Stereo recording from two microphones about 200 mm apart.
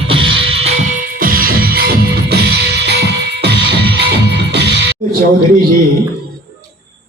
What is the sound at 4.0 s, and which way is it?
Music, 55° right (ahead or behind).